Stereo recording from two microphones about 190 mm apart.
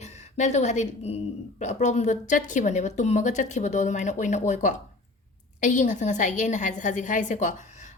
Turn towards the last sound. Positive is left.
turn(degrees=40)  # may be behind; listen again after turning